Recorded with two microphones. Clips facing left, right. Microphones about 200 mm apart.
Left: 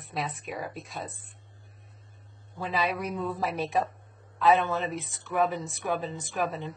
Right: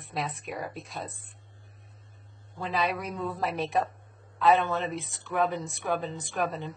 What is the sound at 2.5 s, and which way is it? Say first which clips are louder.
Speech: even; centre (ahead or behind).